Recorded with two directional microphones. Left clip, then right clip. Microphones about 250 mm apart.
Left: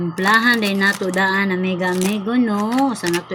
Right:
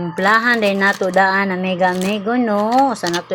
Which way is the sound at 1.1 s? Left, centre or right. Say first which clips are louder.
Right 3 dB; centre.